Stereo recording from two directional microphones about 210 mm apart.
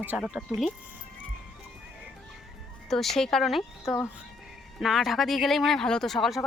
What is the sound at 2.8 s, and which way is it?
Speech, centre (ahead or behind).